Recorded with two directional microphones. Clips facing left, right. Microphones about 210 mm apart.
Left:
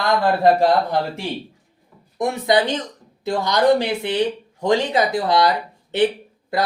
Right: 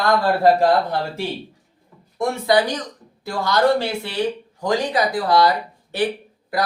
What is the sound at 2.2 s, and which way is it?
Speech, 20° left (ahead or behind).